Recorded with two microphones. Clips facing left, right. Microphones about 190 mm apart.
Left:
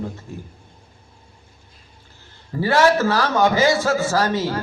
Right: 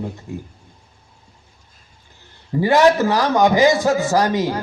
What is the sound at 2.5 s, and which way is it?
A man's voice, 15° right (ahead or behind).